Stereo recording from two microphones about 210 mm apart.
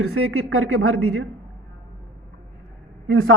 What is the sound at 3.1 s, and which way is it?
Speech, 70° right (ahead or behind).